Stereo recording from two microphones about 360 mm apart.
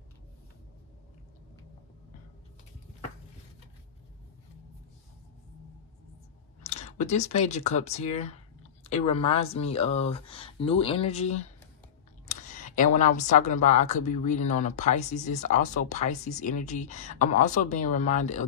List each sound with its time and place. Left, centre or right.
6.6 s speech: centre